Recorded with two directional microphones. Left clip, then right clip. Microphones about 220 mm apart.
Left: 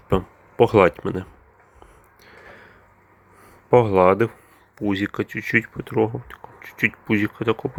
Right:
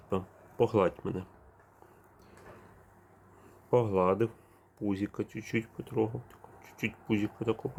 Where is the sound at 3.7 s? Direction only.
20° left (ahead or behind).